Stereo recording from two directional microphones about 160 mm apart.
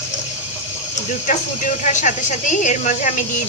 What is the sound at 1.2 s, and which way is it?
A woman's voice, 50° left (ahead or behind).